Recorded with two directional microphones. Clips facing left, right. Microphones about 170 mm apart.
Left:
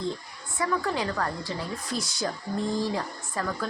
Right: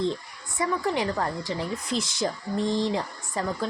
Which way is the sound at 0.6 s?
20° right (ahead or behind).